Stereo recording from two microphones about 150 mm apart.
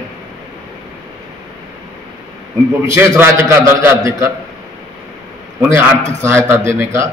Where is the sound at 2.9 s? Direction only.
15° right (ahead or behind).